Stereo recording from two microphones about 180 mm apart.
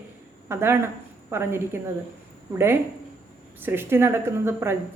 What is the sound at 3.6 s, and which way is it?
A woman's voice, 10° right (ahead or behind).